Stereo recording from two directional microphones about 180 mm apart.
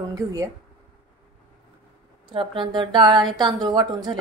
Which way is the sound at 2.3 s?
30° right (ahead or behind).